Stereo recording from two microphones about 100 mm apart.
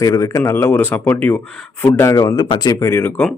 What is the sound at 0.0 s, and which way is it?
Speech, 35° left (ahead or behind).